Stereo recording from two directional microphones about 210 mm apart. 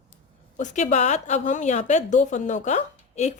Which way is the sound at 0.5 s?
35° left (ahead or behind).